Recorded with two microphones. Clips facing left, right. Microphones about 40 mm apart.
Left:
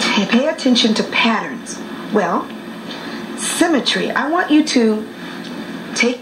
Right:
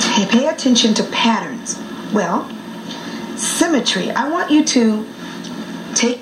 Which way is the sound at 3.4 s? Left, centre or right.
Centre.